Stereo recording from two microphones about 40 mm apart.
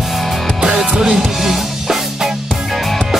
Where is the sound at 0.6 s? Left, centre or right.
Centre.